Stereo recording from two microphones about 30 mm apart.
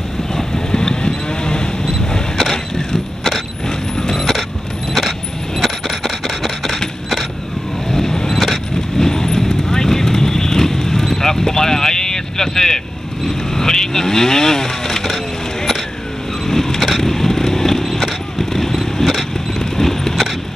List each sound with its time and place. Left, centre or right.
0.3 s vehicle: centre
0.7 s moo: left
2.3 s vehicle: centre
3.6 s mechanisms: centre
4.2 s a sound: centre
5.6 s a sound: centre
7.9 s vehicle: centre
16.4 s vehicle: centre
19.6 s clip-clop: centre